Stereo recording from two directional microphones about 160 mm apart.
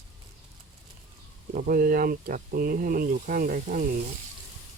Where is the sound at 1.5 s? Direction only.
60° right (ahead or behind).